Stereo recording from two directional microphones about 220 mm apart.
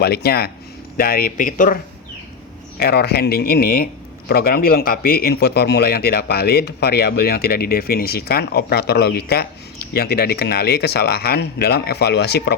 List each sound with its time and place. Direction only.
0.0 s speech: 45° left (ahead or behind)